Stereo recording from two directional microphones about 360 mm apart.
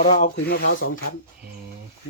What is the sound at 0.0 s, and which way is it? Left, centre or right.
Speech, centre.